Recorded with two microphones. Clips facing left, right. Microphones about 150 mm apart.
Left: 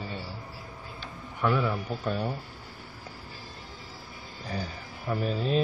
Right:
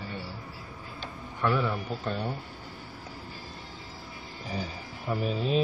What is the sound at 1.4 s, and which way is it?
Speech, 5° left (ahead or behind).